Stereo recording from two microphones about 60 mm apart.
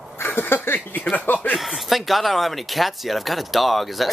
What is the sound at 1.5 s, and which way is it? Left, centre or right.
Speech, centre.